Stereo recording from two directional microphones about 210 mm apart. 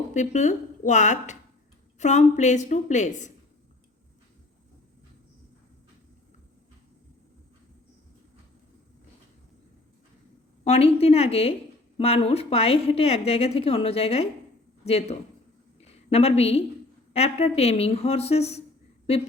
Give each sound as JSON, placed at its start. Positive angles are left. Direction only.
{"t": 0.1, "sound": "a woman's voice", "side_deg": 35}
{"t": 10.6, "sound": "a woman's voice", "side_deg": 30}